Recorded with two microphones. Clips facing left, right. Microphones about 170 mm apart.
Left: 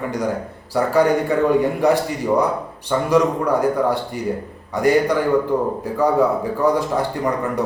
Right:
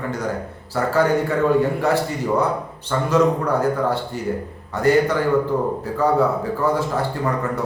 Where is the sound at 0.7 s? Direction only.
15° left (ahead or behind).